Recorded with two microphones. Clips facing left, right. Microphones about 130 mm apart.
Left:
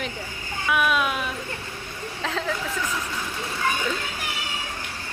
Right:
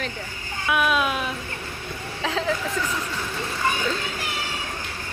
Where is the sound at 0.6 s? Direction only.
Centre (ahead or behind).